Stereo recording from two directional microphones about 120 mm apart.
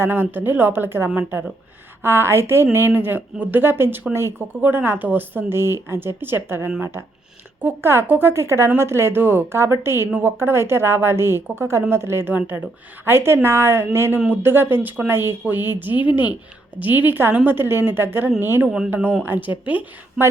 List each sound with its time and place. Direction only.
0.0 s a woman's voice: 15° right (ahead or behind)
18.7 s speech: 5° right (ahead or behind)